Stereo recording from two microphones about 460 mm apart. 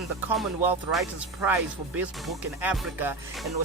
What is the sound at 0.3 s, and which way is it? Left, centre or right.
Speech, centre.